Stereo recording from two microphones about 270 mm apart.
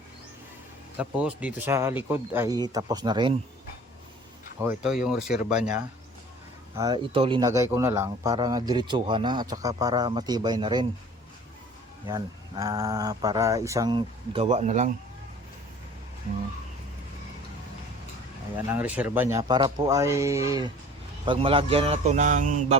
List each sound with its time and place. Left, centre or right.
0.9 s speech: centre
4.6 s speech: centre
6.7 s speech: centre
12.0 s speech: centre
18.5 s speech: centre; by 22.8 s right